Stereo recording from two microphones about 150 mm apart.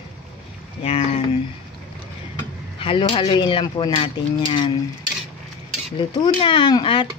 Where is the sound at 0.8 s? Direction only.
45° left (ahead or behind).